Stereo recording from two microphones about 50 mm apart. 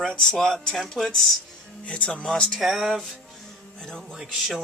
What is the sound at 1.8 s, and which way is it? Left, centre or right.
Speech, left.